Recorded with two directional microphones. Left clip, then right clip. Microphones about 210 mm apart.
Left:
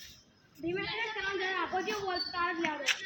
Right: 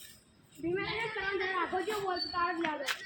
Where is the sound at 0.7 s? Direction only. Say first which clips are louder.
Right 1 dB; 25° left (ahead or behind).